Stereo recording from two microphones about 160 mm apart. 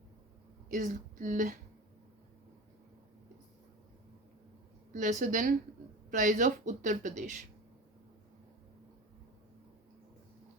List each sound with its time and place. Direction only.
0.7 s speech: 50° right (ahead or behind)
4.9 s speech: 55° right (ahead or behind)